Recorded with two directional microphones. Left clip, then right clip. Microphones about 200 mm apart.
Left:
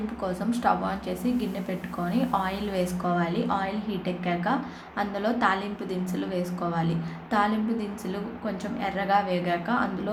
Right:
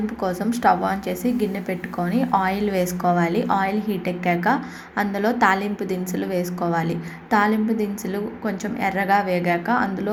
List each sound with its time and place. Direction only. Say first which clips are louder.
0.2 s a woman's voice: right 6 dB; 25° right (ahead or behind)